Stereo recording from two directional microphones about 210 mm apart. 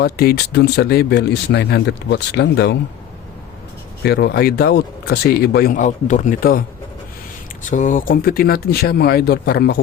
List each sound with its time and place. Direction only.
0.0 s speech: 45° left (ahead or behind)
4.0 s speech: 50° left (ahead or behind)